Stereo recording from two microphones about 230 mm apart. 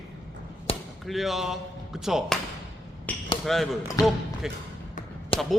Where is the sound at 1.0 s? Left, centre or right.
Centre.